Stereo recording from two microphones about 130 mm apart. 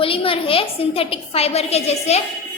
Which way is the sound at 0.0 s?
45° left (ahead or behind).